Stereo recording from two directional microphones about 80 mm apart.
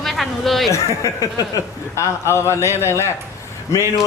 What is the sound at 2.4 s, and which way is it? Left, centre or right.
Speech, left.